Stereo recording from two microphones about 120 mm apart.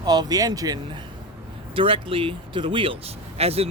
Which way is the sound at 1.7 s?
50° right (ahead or behind).